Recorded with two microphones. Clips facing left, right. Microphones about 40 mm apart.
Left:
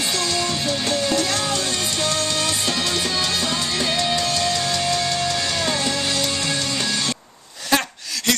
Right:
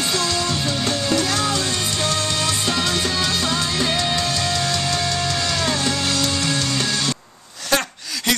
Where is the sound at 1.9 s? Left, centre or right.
Right.